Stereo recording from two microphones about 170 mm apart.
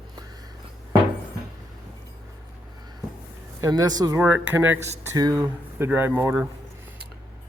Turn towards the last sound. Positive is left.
turn(degrees=-10)  # may be behind; listen again after turning